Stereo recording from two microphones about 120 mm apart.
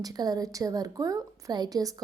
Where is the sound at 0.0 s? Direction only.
30° right (ahead or behind).